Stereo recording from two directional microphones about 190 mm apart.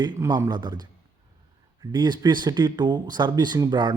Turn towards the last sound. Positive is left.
turn(degrees=-25)  # may be behind; listen again after turning